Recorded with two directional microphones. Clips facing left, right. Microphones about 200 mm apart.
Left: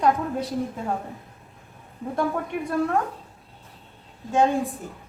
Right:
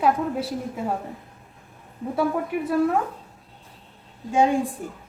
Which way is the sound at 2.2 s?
5° right (ahead or behind).